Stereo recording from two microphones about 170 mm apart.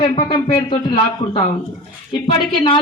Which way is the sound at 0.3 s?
25° left (ahead or behind).